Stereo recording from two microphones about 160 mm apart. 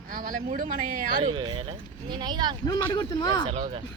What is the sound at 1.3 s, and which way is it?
Speech, 30° right (ahead or behind).